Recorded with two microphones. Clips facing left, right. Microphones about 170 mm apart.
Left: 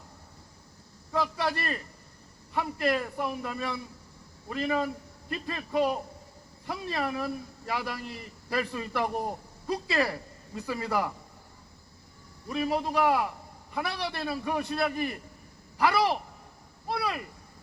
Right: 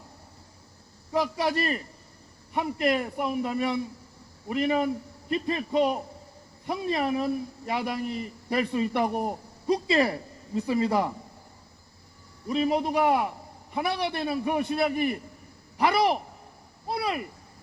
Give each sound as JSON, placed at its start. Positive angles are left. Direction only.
{"t": 1.1, "sound": "a man's voice", "side_deg": -20}
{"t": 12.5, "sound": "a man's voice", "side_deg": -20}